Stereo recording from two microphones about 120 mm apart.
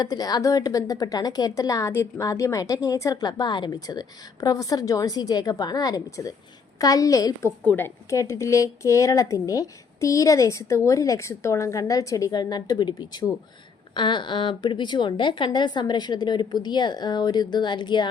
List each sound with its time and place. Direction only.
0.0 s a woman's voice: 35° left (ahead or behind)
7.6 s a woman's voice: 15° left (ahead or behind); by 18.1 s 40° left (ahead or behind)